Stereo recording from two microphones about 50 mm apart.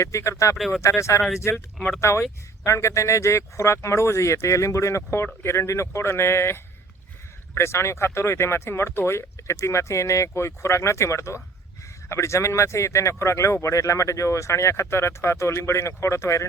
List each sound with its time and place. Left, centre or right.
0.0 s speech: left
1.5 s speech: left
5.2 s speech: left
12.0 s speech: left